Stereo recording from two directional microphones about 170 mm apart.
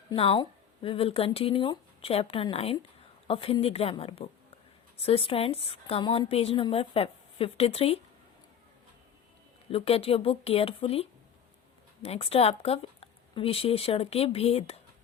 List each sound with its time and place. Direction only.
0.1 s a woman's voice: 30° left (ahead or behind)
9.6 s a woman's voice: 35° left (ahead or behind)